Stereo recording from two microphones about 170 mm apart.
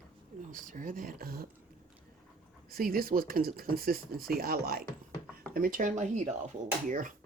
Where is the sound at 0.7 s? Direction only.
55° right (ahead or behind).